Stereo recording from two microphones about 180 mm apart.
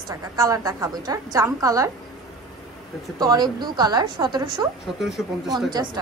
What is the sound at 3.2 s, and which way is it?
A woman's voice, 20° right (ahead or behind).